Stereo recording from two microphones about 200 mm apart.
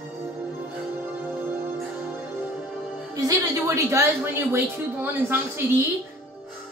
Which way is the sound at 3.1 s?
15° right (ahead or behind).